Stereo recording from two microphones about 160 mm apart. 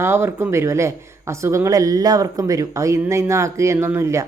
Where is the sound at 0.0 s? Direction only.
15° right (ahead or behind).